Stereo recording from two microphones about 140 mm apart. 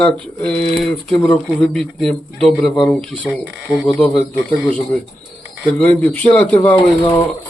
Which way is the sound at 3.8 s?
5° left (ahead or behind).